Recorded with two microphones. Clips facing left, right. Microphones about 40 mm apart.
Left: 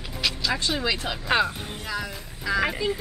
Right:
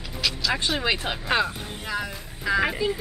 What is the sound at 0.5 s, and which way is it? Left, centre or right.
Speech, right.